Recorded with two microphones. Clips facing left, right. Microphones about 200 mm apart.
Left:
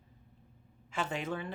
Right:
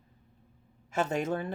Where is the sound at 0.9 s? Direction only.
45° right (ahead or behind).